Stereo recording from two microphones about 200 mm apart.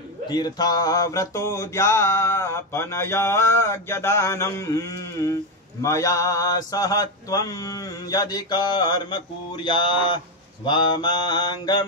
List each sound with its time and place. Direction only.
0.3 s mantra: 20° left (ahead or behind)